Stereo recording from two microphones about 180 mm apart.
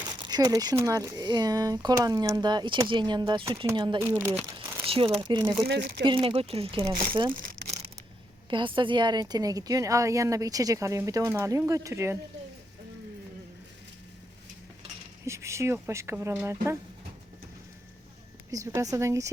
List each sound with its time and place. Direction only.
0.1 s a woman's voice: 25° right (ahead or behind)
4.1 s speech: 10° right (ahead or behind)
4.9 s a woman's voice: 30° right (ahead or behind)
5.6 s speech: 65° right (ahead or behind)
6.0 s a woman's voice: 30° right (ahead or behind)
7.6 s a sound: 90° right
8.4 s a woman's voice: 25° right (ahead or behind)
15.2 s speech: 15° right (ahead or behind)
18.5 s speech: 20° right (ahead or behind)